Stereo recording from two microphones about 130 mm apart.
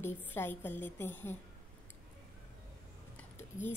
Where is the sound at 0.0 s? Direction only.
15° left (ahead or behind).